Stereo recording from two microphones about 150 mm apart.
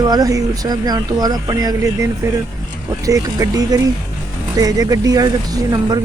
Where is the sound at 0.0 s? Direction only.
25° right (ahead or behind).